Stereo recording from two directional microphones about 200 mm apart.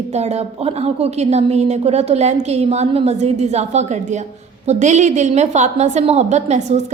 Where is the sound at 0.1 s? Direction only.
35° right (ahead or behind).